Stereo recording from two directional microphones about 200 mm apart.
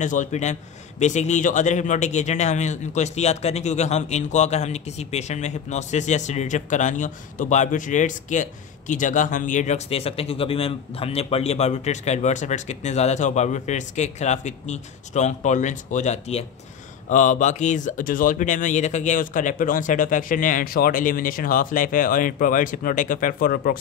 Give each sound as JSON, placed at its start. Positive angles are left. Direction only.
{"t": 0.0, "sound": "a man's voice", "side_deg": 40}